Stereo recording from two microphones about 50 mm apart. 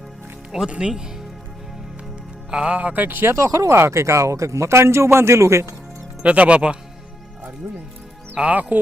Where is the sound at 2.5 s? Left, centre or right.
Right.